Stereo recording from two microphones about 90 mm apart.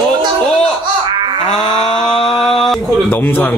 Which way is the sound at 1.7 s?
60° left (ahead or behind).